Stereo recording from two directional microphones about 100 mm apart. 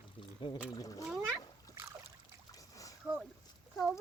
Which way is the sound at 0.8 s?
40° left (ahead or behind).